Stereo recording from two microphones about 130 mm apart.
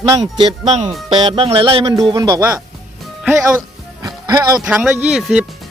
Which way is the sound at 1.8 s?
25° right (ahead or behind).